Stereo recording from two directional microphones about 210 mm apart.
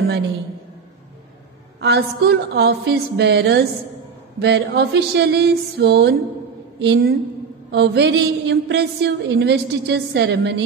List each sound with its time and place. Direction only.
1.8 s a woman's voice: 50° right (ahead or behind)